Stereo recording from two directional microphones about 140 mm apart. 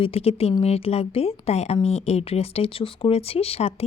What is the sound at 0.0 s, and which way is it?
Speech, 45° left (ahead or behind).